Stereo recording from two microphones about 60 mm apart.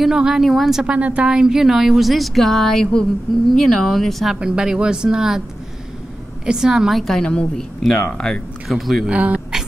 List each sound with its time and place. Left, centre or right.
0.0 s speech: centre
0.8 s speech: right; by 4.4 s centre
4.4 s speech: centre
6.4 s speech: centre
7.2 s a woman's voice: centre
8.6 s speech: centre
9.0 s speech: right